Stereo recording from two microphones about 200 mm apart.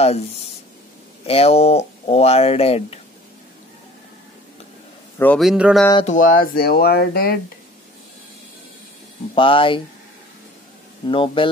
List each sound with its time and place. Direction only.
0.0 s speech: 30° left (ahead or behind)
5.2 s a man's voice: 5° left (ahead or behind)
6.0 s speech: 40° left (ahead or behind)
9.3 s speech: 25° left (ahead or behind)
11.1 s speech: 25° left (ahead or behind)